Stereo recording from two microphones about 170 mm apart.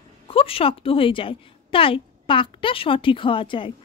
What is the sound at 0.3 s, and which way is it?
A woman's voice, 35° left (ahead or behind).